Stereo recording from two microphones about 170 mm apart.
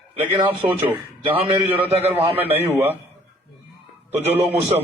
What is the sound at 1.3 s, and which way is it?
A man's voice, 30° right (ahead or behind).